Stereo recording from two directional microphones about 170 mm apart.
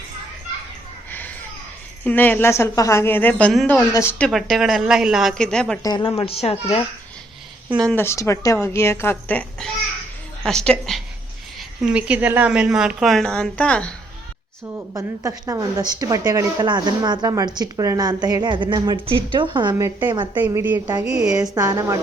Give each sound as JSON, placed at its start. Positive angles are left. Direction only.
{"t": 2.0, "sound": "a woman's voice", "side_deg": 10}
{"t": 3.9, "sound": "a woman's voice", "side_deg": 15}
{"t": 4.3, "sound": "a woman's voice", "side_deg": 0}
{"t": 5.8, "sound": "speech", "side_deg": 25}
{"t": 7.9, "sound": "a woman's voice", "side_deg": 15}
{"t": 14.9, "sound": "speech", "side_deg": -20}
{"t": 20.5, "sound": "a woman's voice", "side_deg": -15}
{"t": 21.2, "sound": "speech", "side_deg": -20}